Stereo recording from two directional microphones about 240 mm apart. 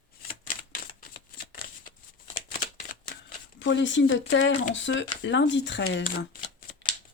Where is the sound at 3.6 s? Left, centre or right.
Left.